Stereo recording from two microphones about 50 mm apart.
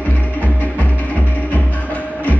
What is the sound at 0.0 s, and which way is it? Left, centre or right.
Music, left.